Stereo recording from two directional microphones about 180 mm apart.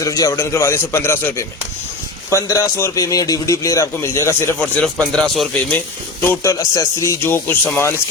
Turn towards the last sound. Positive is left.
turn(degrees=10)  # may be behind; listen again after turning